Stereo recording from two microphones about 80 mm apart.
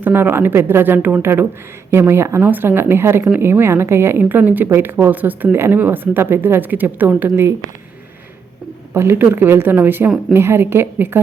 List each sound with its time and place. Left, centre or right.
0.0 s a woman's voice: right
7.3 s a woman's voice: right
8.9 s a woman's voice: right